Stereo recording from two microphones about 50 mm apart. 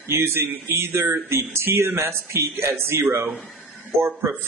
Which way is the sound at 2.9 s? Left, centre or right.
Right.